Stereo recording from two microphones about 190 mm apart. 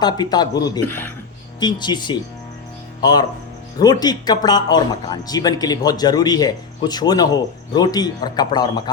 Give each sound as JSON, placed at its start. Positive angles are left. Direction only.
{"t": 0.0, "sound": "speech", "side_deg": 20}